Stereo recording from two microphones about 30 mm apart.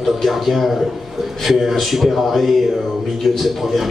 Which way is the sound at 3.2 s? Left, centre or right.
Centre.